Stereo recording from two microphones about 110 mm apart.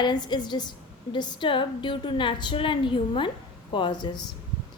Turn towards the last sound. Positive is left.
turn(degrees=45)  # may be behind; listen again after turning